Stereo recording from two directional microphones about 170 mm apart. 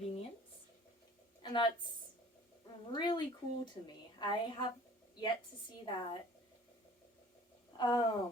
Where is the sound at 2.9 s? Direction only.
25° left (ahead or behind).